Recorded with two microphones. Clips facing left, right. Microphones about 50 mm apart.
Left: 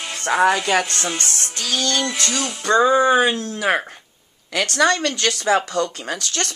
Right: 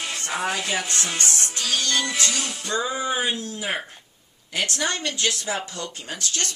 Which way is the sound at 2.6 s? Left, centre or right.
Left.